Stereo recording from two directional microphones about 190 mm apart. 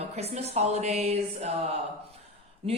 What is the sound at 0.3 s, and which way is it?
Speech, 35° right (ahead or behind).